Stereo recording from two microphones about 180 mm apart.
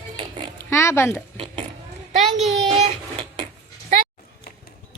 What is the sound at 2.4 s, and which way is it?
Speech, centre (ahead or behind).